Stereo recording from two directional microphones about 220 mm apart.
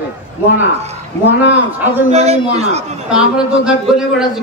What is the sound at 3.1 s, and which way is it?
A man's voice, 5° right (ahead or behind).